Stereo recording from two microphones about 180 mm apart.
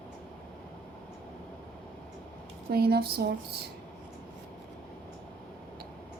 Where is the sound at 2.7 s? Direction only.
60° right (ahead or behind).